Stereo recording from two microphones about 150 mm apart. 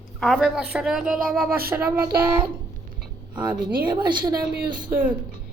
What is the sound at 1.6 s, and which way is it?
Child singing, 15° right (ahead or behind).